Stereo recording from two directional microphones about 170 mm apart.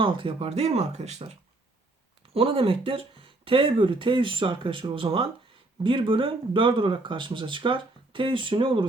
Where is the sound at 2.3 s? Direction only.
30° right (ahead or behind).